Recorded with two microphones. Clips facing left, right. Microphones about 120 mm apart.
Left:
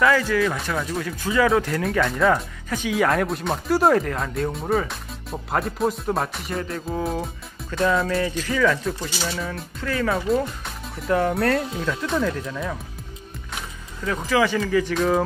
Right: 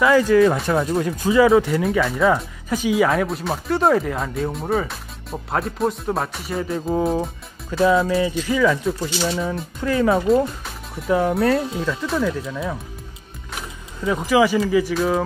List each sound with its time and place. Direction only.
0.3 s speech: 30° right (ahead or behind)
1.1 s speech: 15° right (ahead or behind)
1.5 s speech: 5° right (ahead or behind)
9.8 s speech: 20° right (ahead or behind)
10.1 s speech: centre (ahead or behind)
14.0 s speech: 15° right (ahead or behind)